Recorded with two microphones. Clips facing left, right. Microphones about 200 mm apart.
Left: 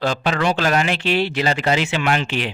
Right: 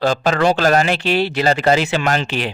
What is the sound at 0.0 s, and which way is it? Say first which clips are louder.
A man's voice: right 4 dB; 40° right (ahead or behind).